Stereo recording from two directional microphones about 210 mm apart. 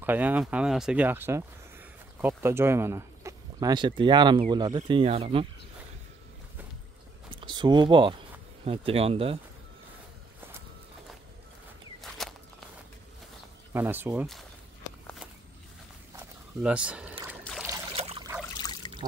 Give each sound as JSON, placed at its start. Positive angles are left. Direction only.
{"t": 0.0, "sound": "speech", "side_deg": -10}
{"t": 7.3, "sound": "speech", "side_deg": -20}
{"t": 12.0, "sound": "walk", "side_deg": 0}
{"t": 13.7, "sound": "speech", "side_deg": -10}
{"t": 16.2, "sound": "a sound", "side_deg": -5}
{"t": 17.9, "sound": "trickle", "side_deg": -30}
{"t": 18.6, "sound": "trickle", "side_deg": 20}